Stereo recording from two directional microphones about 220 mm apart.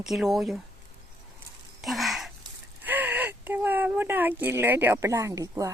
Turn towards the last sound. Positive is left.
turn(degrees=-15)  # may be behind; listen again after turning